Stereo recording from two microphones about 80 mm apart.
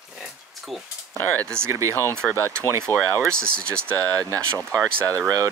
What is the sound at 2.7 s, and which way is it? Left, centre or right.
Speech, right.